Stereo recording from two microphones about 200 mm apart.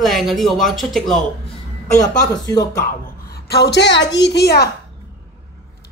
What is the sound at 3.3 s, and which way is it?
A woman's voice, 55° left (ahead or behind).